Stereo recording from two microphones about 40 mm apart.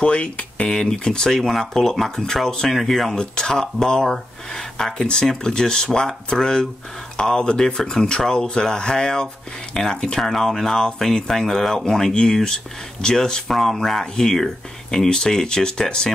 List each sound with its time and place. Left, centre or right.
0.0 s speech: left
0.7 s speech: centre
2.7 s speech: centre
3.2 s speech: centre